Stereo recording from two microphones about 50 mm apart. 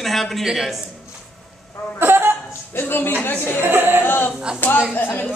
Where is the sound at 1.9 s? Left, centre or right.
Right.